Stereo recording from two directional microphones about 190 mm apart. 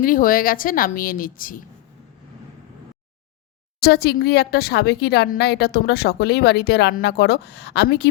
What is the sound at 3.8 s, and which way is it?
Speech, 55° left (ahead or behind).